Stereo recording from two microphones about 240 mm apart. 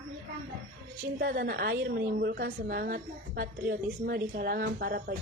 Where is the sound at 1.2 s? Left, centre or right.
Right.